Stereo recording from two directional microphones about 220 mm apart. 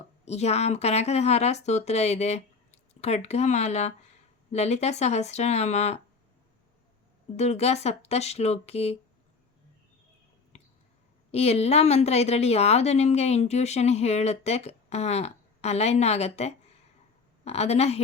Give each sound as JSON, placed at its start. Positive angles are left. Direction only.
{"t": 0.3, "sound": "a woman's voice", "side_deg": 30}
{"t": 7.3, "sound": "a woman's voice", "side_deg": 30}
{"t": 10.5, "sound": "a sound", "side_deg": 30}
{"t": 11.3, "sound": "a woman's voice", "side_deg": 30}